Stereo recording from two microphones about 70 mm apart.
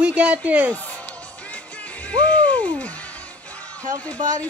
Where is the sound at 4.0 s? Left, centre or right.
Centre.